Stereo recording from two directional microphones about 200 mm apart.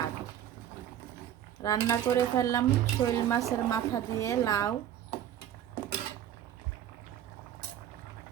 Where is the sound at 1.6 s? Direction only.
15° left (ahead or behind).